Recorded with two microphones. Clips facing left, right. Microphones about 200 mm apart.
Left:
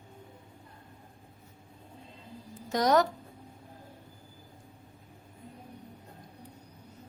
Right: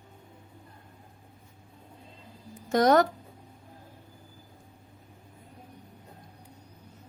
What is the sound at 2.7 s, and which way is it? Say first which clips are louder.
Speech: right 4 dB; 55° right (ahead or behind).